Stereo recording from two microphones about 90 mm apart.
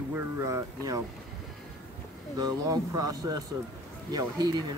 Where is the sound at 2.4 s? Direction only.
45° right (ahead or behind).